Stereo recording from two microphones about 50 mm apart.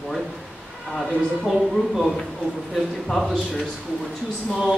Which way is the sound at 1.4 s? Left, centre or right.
Centre.